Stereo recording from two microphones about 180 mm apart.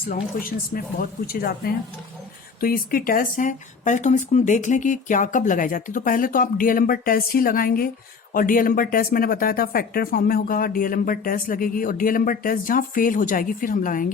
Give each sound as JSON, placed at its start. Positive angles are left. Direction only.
{"t": 0.1, "sound": "speech", "side_deg": 50}